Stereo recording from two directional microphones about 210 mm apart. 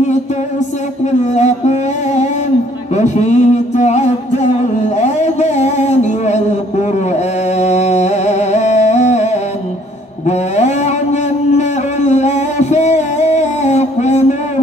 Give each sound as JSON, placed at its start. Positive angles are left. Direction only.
{"t": 1.2, "sound": "music", "side_deg": 35}
{"t": 2.9, "sound": "a sound", "side_deg": 35}
{"t": 11.5, "sound": "music", "side_deg": 35}